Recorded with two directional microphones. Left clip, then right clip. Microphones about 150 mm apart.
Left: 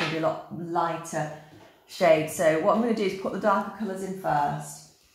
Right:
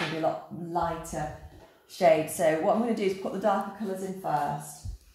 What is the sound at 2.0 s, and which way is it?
Speech, centre (ahead or behind).